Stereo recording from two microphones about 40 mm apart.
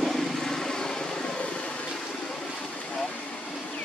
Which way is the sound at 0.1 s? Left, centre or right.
Centre.